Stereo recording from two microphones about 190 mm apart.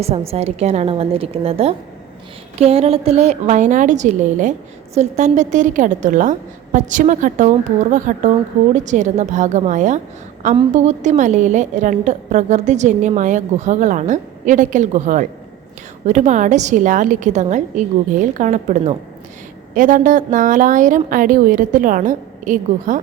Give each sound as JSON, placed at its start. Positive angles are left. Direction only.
{"t": 0.0, "sound": "a woman's voice", "side_deg": -30}